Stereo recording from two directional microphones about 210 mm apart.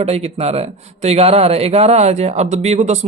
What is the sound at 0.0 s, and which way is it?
Speech, 30° right (ahead or behind).